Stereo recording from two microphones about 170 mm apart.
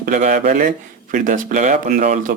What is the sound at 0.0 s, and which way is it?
Speech, 50° right (ahead or behind).